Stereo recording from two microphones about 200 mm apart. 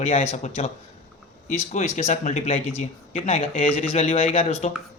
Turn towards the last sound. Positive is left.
turn(degrees=30)  # may be behind; listen again after turning